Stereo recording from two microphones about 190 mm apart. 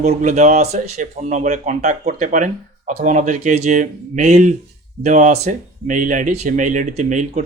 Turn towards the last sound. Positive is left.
turn(degrees=-40)  # may be behind; listen again after turning